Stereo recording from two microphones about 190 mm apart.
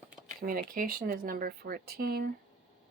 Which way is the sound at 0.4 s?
50° right (ahead or behind).